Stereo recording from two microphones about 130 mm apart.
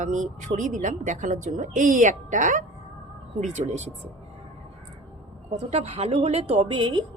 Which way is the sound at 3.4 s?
65° right (ahead or behind).